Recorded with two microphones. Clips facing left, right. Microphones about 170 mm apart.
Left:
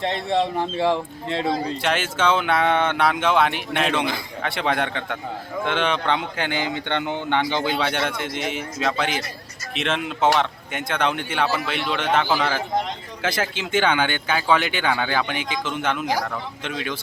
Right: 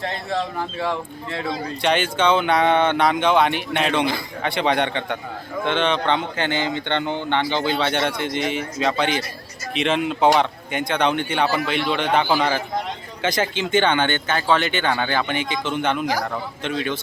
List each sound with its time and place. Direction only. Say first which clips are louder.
0.0 s speech: left 3 dB; 25° left (ahead or behind)
1.8 s speech: right 6 dB; 5° left (ahead or behind)
13.2 s speech: right 3 dB; 5° left (ahead or behind)